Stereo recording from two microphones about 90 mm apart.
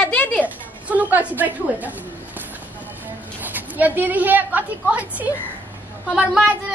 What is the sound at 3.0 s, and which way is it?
Speech, 20° right (ahead or behind).